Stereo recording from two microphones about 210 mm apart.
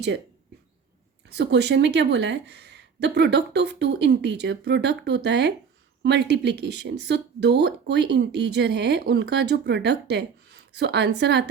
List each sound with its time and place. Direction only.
1.3 s speech: 55° right (ahead or behind)